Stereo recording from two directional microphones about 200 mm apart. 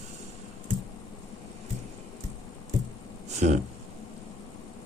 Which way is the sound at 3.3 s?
35° right (ahead or behind).